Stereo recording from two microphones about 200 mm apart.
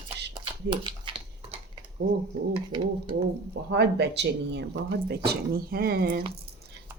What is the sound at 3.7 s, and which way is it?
Speech, 60° right (ahead or behind).